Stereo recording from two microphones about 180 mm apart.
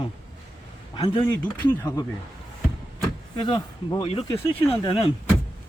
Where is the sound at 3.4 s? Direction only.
25° left (ahead or behind).